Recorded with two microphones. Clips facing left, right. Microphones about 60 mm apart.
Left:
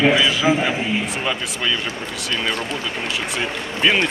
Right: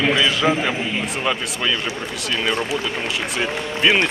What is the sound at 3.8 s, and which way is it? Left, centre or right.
Speech, centre.